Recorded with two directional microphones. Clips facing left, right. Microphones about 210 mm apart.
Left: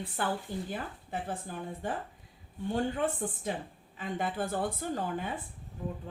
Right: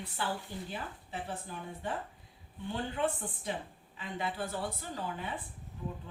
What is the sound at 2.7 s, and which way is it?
A woman's voice, 45° left (ahead or behind).